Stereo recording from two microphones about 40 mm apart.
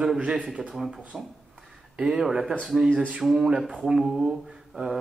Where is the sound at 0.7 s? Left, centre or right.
Centre.